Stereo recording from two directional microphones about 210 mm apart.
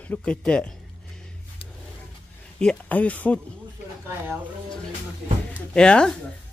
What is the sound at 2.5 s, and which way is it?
Speech, 5° left (ahead or behind).